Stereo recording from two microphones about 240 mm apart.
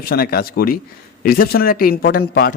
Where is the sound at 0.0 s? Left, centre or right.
Left.